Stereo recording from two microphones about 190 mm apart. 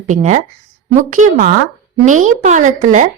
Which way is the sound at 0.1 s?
40° right (ahead or behind).